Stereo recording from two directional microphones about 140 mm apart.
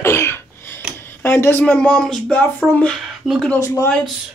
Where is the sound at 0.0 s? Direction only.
20° left (ahead or behind); by 3.5 s centre (ahead or behind).